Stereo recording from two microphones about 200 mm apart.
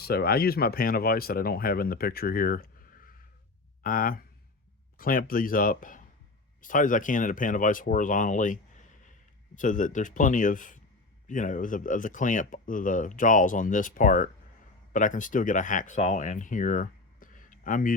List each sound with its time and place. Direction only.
0.0 s speech: 50° left (ahead or behind)
9.6 s speech: 40° left (ahead or behind)